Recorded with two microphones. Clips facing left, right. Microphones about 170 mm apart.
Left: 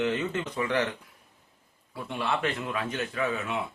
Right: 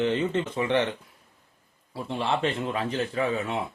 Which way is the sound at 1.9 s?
30° right (ahead or behind).